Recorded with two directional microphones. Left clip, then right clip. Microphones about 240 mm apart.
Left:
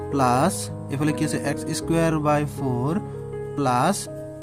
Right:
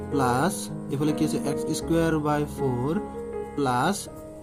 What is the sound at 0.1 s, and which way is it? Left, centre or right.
Speech, left.